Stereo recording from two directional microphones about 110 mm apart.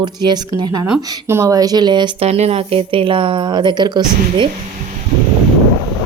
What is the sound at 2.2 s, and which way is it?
Speech, 75° right (ahead or behind).